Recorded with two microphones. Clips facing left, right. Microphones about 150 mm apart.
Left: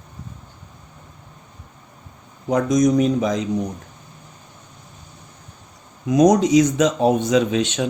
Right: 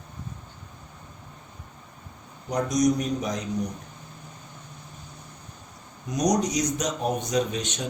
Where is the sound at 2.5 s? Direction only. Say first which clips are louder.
Left 6 dB; 90° left.